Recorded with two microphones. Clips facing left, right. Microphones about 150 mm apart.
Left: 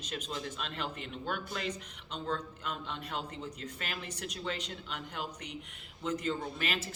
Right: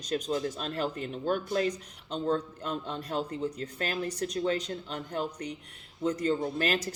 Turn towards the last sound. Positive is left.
turn(degrees=-40)  # may be behind; listen again after turning